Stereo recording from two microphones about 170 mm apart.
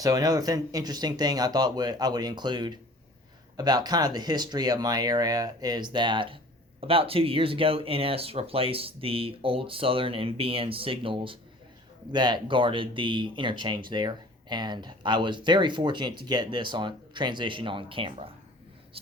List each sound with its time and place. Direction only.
0.0 s speech: 20° right (ahead or behind)